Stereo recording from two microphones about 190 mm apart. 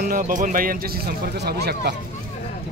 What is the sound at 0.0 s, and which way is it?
Speech, 45° right (ahead or behind).